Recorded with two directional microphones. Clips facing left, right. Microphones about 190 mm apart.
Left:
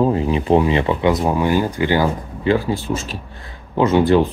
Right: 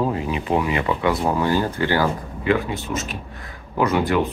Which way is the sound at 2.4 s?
30° left (ahead or behind).